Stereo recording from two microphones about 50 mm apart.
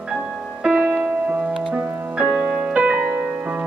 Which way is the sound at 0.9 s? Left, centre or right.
Right.